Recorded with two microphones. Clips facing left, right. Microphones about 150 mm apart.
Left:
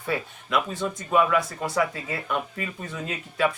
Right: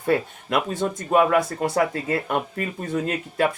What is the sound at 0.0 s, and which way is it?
Speech, 50° right (ahead or behind).